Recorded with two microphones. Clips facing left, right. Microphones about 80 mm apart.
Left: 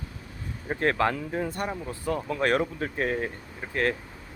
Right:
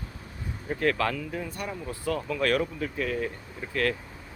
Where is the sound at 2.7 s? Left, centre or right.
Left.